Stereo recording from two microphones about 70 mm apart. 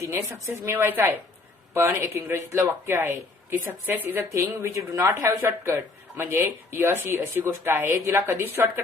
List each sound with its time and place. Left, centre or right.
0.0 s speech: right
4.5 s speech: right
8.0 s speech: right